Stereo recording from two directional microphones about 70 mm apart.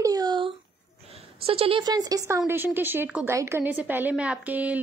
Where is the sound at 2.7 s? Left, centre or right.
Right.